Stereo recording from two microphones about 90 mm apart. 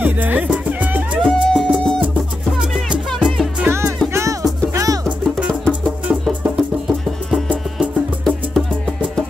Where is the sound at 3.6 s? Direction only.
20° right (ahead or behind).